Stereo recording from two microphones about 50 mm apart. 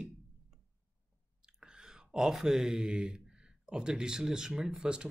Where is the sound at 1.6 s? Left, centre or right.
Centre.